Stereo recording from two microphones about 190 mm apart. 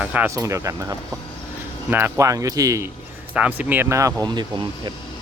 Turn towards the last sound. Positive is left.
turn(degrees=-20)  # may be behind; listen again after turning